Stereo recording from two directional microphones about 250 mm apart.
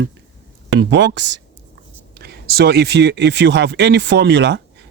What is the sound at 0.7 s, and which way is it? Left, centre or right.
Speech, right.